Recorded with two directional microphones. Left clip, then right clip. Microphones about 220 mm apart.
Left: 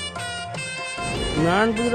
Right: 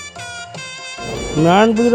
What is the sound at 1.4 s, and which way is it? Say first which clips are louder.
Speech: right 8 dB; 20° right (ahead or behind).